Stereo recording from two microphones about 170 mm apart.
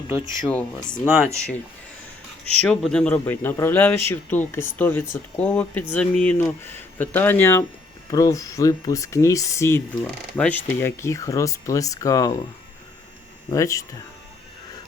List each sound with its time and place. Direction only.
0.4 s speech: 5° left (ahead or behind)
2.6 s speech: 5° left (ahead or behind)
13.5 s speech: 20° left (ahead or behind)